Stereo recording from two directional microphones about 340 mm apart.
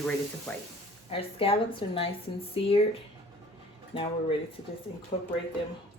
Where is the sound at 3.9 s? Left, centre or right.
Centre.